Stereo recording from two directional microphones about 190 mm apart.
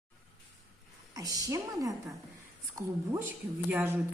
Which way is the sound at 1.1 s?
20° right (ahead or behind).